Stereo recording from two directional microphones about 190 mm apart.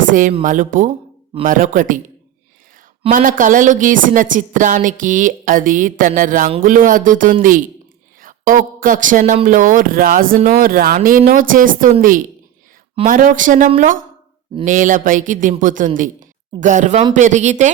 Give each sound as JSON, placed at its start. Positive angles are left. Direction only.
{"t": 0.1, "sound": "speech", "side_deg": -45}
{"t": 1.5, "sound": "speech", "side_deg": -45}
{"t": 3.1, "sound": "a woman's voice", "side_deg": -45}